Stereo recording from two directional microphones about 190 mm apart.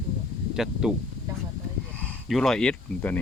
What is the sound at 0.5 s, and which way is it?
Speech, 5° right (ahead or behind).